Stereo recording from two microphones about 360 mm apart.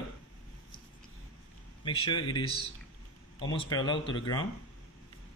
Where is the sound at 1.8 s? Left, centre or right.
Centre.